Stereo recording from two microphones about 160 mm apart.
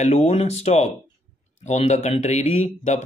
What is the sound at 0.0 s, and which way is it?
Speech, 45° left (ahead or behind).